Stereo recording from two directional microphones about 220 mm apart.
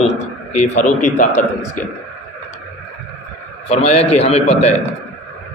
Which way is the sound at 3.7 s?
30° left (ahead or behind).